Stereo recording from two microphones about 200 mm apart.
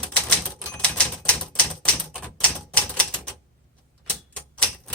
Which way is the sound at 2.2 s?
5° left (ahead or behind).